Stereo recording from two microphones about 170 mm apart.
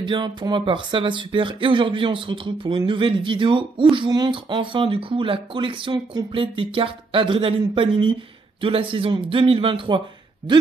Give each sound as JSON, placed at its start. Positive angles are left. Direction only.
{"t": 0.0, "sound": "a man's voice", "side_deg": -25}